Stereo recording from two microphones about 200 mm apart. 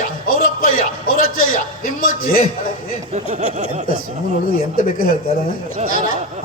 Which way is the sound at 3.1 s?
35° right (ahead or behind).